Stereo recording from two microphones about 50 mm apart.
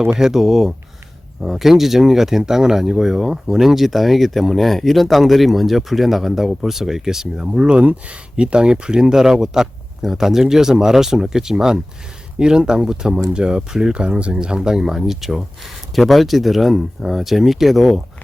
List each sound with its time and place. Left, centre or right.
0.2 s speech: centre